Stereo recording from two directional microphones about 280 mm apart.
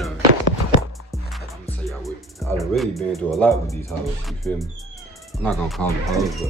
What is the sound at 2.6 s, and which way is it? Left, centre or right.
Speech, centre.